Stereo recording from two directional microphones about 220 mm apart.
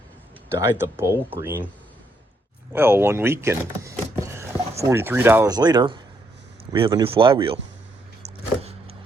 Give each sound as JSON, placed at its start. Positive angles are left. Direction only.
{"t": 0.6, "sound": "speech", "side_deg": -10}
{"t": 2.7, "sound": "speech", "side_deg": -10}